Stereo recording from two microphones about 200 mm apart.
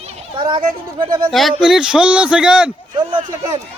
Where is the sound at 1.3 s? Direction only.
Centre (ahead or behind).